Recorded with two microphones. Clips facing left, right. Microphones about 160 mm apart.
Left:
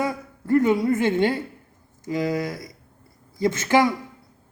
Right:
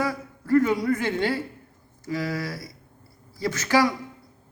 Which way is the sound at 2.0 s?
20° left (ahead or behind).